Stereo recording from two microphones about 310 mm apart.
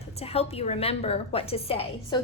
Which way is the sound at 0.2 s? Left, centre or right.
Centre.